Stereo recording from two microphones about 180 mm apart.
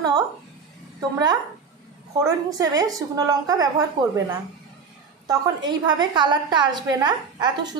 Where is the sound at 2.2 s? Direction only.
20° right (ahead or behind).